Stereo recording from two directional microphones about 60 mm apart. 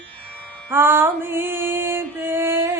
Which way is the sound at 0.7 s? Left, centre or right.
Right.